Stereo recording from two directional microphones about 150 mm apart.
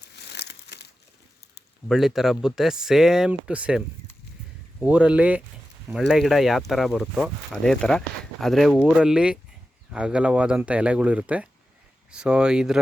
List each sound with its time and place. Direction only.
0.3 s crumpling: 90° left
1.9 s speech: centre (ahead or behind)
4.9 s speech: 10° right (ahead or behind)